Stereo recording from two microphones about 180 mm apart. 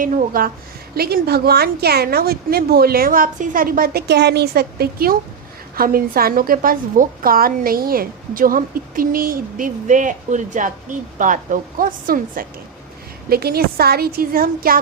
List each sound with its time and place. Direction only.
0.0 s a woman's voice: 50° right (ahead or behind)